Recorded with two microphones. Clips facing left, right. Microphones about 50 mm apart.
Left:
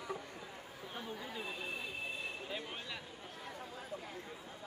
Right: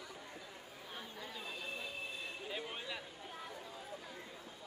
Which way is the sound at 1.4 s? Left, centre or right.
Left.